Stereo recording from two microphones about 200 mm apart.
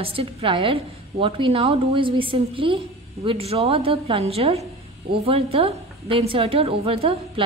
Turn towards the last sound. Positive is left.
turn(degrees=-30)  # may be behind; listen again after turning